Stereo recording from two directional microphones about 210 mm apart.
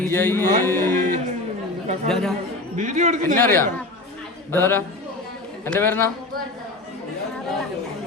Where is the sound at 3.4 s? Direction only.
10° left (ahead or behind).